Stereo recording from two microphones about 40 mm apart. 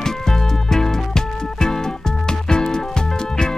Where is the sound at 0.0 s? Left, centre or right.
Centre.